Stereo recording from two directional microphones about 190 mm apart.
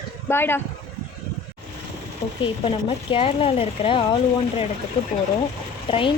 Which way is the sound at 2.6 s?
30° left (ahead or behind).